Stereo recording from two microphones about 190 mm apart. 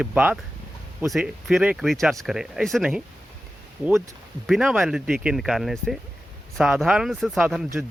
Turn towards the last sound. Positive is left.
turn(degrees=0)  # may be behind; listen again after turning